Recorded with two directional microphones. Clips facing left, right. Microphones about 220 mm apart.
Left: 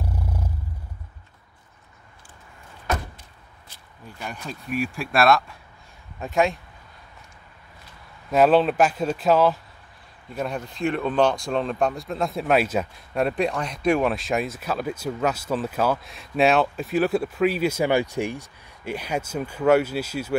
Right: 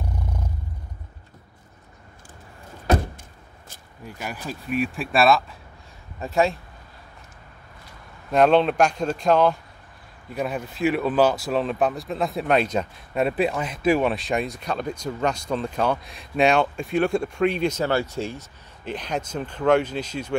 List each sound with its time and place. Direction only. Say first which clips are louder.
0.0 s a sound: left 1 dB; 5° left (ahead or behind)
2.9 s vehicle: right 6 dB; 30° right (ahead or behind)
4.0 s speech: right 2 dB; 5° right (ahead or behind)
8.3 s speech: even; 5° left (ahead or behind)